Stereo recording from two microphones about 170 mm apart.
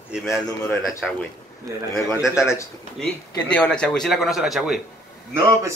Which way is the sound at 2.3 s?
15° left (ahead or behind).